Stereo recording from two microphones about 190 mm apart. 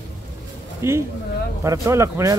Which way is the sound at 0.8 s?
15° right (ahead or behind).